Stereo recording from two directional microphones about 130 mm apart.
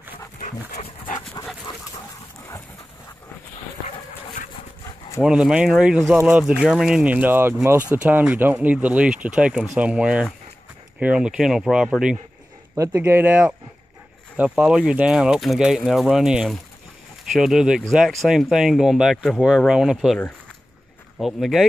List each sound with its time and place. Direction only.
0.4 s dog: 60° left (ahead or behind)
5.2 s speech: 5° right (ahead or behind)
12.7 s speech: 20° right (ahead or behind); by 20.2 s 5° right (ahead or behind)
21.2 s speech: centre (ahead or behind)